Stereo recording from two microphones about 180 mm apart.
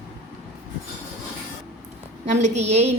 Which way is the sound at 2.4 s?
40° right (ahead or behind).